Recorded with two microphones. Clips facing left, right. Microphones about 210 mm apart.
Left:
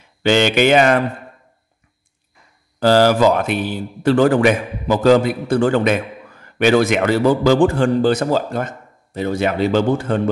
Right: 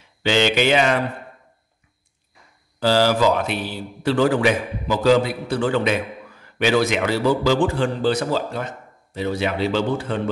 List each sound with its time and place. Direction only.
0.2 s a man's voice: 50° left (ahead or behind)
2.8 s a man's voice: 50° left (ahead or behind)